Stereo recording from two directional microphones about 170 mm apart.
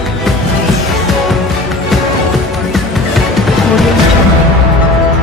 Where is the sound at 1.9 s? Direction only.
Centre (ahead or behind).